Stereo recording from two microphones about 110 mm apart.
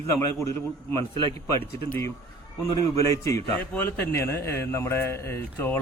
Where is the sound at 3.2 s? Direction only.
30° left (ahead or behind).